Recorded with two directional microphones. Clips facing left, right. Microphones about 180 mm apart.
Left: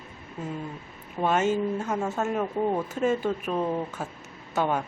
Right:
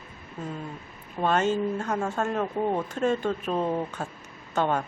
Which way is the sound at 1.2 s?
10° left (ahead or behind).